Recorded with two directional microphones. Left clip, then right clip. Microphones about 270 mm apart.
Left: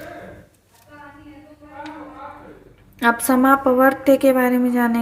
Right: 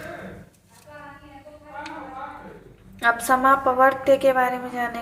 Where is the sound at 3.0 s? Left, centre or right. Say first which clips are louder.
Left 2 dB; left.